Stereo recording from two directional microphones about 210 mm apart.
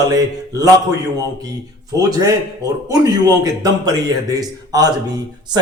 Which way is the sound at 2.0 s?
15° right (ahead or behind).